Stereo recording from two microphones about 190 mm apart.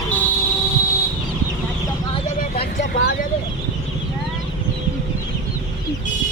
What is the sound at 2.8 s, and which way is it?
Vehicle, 55° left (ahead or behind).